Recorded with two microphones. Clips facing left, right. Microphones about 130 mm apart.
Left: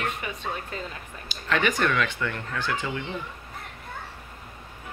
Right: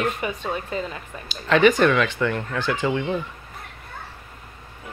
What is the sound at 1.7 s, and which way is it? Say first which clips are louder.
Speech: right 7 dB; 90° right.